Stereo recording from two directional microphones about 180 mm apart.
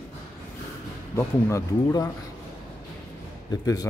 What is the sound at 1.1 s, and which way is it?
Speech, 15° left (ahead or behind).